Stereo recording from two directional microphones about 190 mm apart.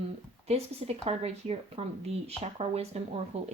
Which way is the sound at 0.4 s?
35° right (ahead or behind).